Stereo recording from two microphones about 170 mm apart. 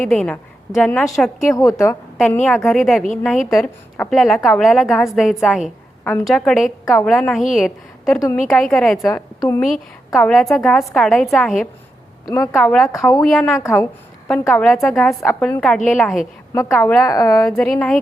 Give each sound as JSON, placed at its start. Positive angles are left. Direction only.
{"t": 0.0, "sound": "a woman's voice", "side_deg": 5}
{"t": 1.5, "sound": "a woman's voice", "side_deg": 20}
{"t": 2.1, "sound": "a woman's voice", "side_deg": 5}
{"t": 9.0, "sound": "a woman's voice", "side_deg": 20}
{"t": 9.6, "sound": "a woman's voice", "side_deg": 0}
{"t": 12.3, "sound": "speech", "side_deg": 20}
{"t": 12.5, "sound": "a woman's voice", "side_deg": 5}
{"t": 13.6, "sound": "a woman's voice", "side_deg": 15}
{"t": 14.3, "sound": "a woman's voice", "side_deg": 5}
{"t": 17.1, "sound": "speech", "side_deg": 20}
{"t": 17.4, "sound": "a woman's voice", "side_deg": 5}